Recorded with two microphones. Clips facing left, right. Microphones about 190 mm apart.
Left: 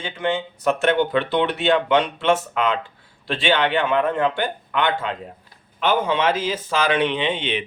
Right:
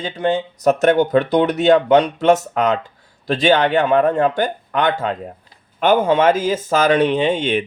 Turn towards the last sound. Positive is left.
turn(degrees=-45)  # may be behind; listen again after turning